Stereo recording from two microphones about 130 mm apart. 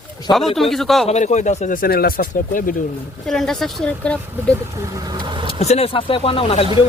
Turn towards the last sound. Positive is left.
turn(degrees=45)  # may be behind; listen again after turning